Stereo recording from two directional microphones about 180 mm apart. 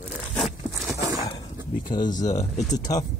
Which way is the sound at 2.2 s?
40° left (ahead or behind).